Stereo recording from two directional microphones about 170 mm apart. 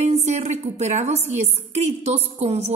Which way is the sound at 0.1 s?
40° right (ahead or behind).